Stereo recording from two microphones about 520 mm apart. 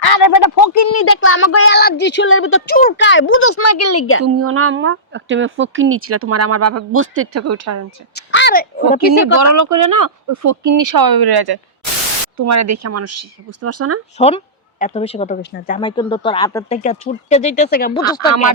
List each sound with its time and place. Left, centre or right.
0.0 s speech: left
4.4 s speech: right
8.1 s speech: centre
9.1 s speech: right
12.4 s speech: right
14.2 s speech: centre